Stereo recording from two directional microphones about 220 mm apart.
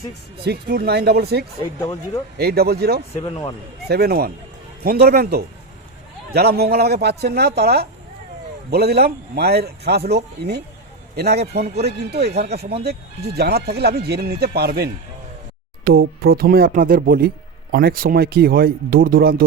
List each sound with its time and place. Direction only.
0.4 s speech: 45° right (ahead or behind)
1.8 s speech: 15° left (ahead or behind)
2.4 s speech: 45° right (ahead or behind)
3.2 s speech: 20° left (ahead or behind)
3.8 s speech: 45° right (ahead or behind)